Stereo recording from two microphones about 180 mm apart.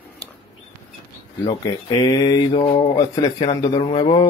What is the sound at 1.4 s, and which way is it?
Speech, 25° left (ahead or behind).